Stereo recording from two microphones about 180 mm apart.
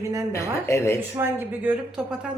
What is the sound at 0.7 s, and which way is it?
Speech, 15° left (ahead or behind).